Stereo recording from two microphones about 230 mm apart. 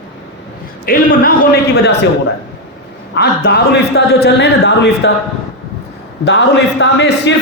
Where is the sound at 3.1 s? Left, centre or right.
Left.